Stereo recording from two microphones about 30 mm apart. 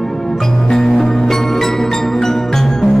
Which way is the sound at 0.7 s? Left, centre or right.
Centre.